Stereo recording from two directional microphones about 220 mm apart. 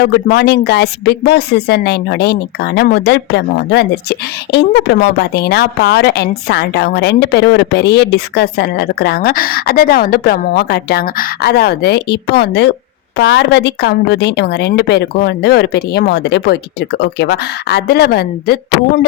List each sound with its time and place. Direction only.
0.0 s speech: 50° left (ahead or behind)